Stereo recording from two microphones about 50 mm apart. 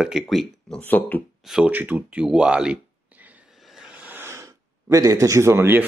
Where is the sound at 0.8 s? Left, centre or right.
Left.